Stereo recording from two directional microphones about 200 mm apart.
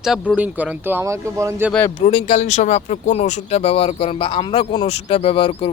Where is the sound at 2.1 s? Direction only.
30° left (ahead or behind).